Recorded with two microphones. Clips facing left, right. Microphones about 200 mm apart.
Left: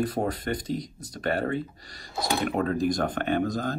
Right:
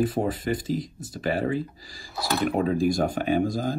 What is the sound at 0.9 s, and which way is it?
Speech, 25° right (ahead or behind).